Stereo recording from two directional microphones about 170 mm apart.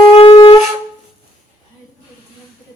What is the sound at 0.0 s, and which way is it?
Wind instrument, 30° left (ahead or behind).